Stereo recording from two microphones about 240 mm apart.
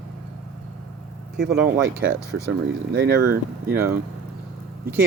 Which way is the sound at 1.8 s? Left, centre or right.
Right.